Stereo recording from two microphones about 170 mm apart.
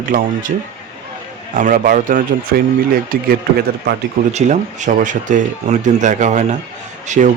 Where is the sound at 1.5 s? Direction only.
50° right (ahead or behind).